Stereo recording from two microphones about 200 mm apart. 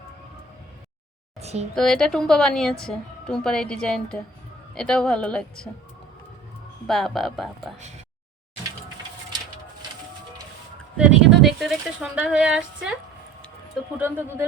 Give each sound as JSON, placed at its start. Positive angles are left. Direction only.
{"t": 1.4, "sound": "a sound", "side_deg": -30}
{"t": 1.7, "sound": "a woman's voice", "side_deg": 0}
{"t": 6.8, "sound": "a woman's voice", "side_deg": 0}
{"t": 7.8, "sound": "speech", "side_deg": -35}
{"t": 10.9, "sound": "a woman's voice", "side_deg": -5}
{"t": 14.0, "sound": "speech", "side_deg": -10}